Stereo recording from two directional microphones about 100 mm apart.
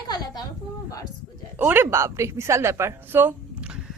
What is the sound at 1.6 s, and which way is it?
A woman's voice, 25° right (ahead or behind).